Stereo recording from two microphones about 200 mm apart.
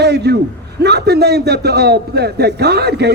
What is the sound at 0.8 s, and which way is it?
A man's voice, 55° right (ahead or behind).